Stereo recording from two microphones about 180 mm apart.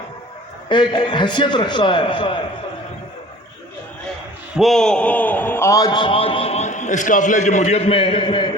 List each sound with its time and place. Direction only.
0.7 s a man's voice: 25° left (ahead or behind)
4.5 s a man's voice: centre (ahead or behind); by 8.4 s 30° left (ahead or behind)